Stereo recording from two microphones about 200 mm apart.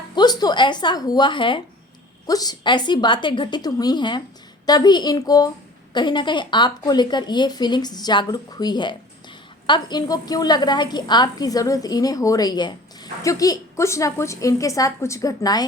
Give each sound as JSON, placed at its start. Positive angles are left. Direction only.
{"t": 0.2, "sound": "a woman's voice", "side_deg": 20}